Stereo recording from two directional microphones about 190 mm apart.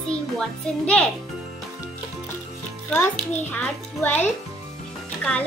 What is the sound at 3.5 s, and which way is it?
A child's voice, 10° left (ahead or behind).